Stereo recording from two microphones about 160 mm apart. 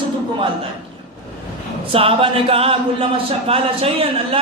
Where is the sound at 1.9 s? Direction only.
35° right (ahead or behind).